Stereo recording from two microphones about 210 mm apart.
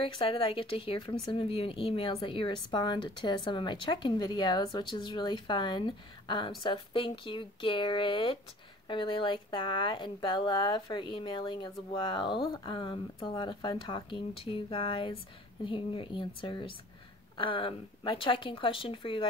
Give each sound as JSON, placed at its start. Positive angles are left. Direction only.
{"t": 0.0, "sound": "speech", "side_deg": 25}